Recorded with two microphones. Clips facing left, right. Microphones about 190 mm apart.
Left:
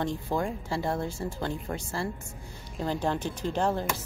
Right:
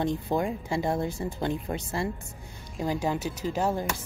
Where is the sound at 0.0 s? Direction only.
15° right (ahead or behind).